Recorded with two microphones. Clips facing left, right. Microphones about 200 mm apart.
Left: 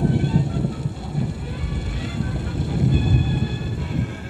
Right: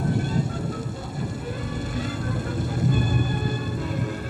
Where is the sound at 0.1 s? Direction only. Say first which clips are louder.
Left 4 dB; 45° right (ahead or behind).